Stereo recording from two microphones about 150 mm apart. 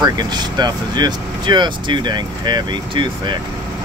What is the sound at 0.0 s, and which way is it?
Speech, 30° right (ahead or behind).